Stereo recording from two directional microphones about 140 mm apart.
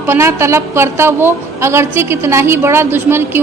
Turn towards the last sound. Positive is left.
turn(degrees=-15)  # may be behind; listen again after turning